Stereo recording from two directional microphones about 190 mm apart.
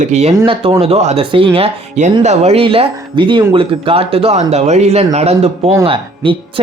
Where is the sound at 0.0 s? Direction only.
35° right (ahead or behind).